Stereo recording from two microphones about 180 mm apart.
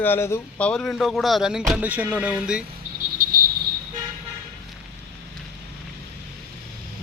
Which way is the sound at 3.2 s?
50° right (ahead or behind).